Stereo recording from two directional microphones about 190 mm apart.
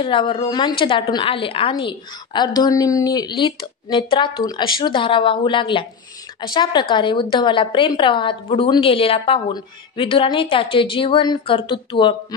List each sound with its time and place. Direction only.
0.0 s a woman's voice: 25° left (ahead or behind)